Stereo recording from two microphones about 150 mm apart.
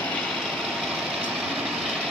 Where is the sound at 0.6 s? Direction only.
Centre (ahead or behind).